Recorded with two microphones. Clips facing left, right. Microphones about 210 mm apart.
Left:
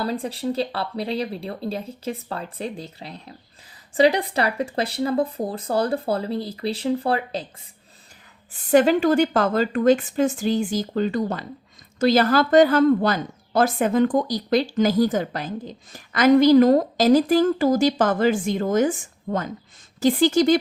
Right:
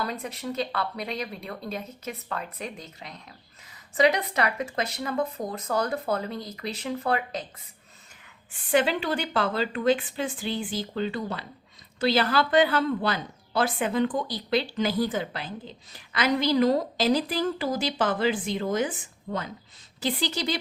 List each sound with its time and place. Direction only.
0.0 s speech: 30° left (ahead or behind)
8.5 s a woman's voice: 45° left (ahead or behind)